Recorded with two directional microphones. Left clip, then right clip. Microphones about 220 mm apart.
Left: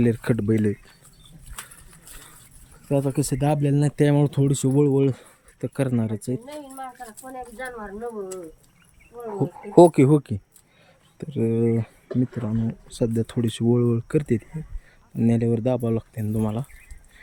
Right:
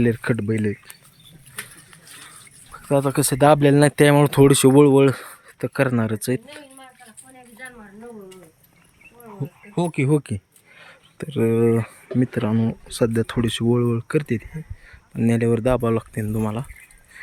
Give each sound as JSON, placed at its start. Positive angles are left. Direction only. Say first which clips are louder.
{"t": 0.0, "sound": "speech", "louder": "right 2 dB", "side_deg": 5}
{"t": 2.7, "sound": "speech", "louder": "right 4 dB", "side_deg": 0}
{"t": 4.6, "sound": "speech", "louder": "right 7 dB", "side_deg": -40}
{"t": 4.9, "sound": "speech", "louder": "right 6 dB", "side_deg": 0}
{"t": 9.7, "sound": "speech", "louder": "left 8 dB", "side_deg": 20}
{"t": 12.2, "sound": "speech", "louder": "right 7 dB", "side_deg": -35}
{"t": 13.0, "sound": "speech", "louder": "right 4 dB", "side_deg": 5}